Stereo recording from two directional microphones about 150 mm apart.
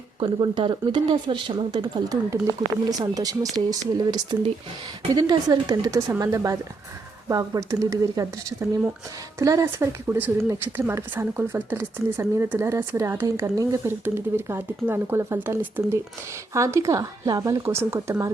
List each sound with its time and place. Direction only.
0.2 s speech: 30° right (ahead or behind)